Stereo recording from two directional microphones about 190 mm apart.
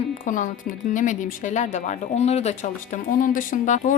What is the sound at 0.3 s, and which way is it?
A woman's voice, 45° left (ahead or behind).